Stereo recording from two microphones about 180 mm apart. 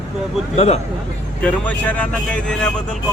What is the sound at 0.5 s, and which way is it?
Speech, 35° left (ahead or behind).